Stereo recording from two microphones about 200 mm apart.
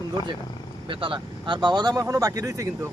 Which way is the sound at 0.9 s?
25° right (ahead or behind).